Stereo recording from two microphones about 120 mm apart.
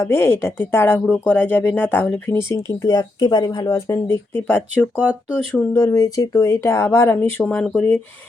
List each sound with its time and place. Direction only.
0.0 s speech: 20° left (ahead or behind)
4.9 s speech: 10° right (ahead or behind)
5.7 s speech: 25° left (ahead or behind); by 7.9 s 5° left (ahead or behind)